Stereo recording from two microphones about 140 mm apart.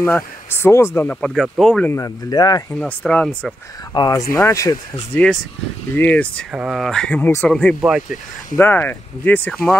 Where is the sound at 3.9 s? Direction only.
25° left (ahead or behind).